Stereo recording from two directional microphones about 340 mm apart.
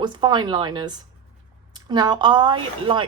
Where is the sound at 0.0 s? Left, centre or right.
Centre.